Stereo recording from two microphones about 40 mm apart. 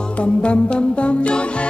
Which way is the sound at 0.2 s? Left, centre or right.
Left.